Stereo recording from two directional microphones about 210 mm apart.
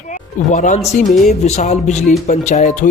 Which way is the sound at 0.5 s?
35° left (ahead or behind).